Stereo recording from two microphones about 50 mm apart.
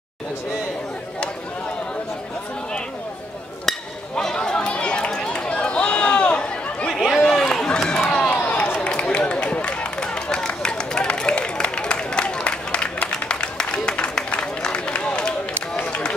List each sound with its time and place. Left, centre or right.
4.1 s chatter: centre
6.9 s a sound: centre
7.2 s run: centre
8.5 s run: left